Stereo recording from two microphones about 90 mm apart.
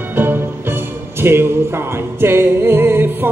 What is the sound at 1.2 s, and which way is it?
Speech, 25° right (ahead or behind).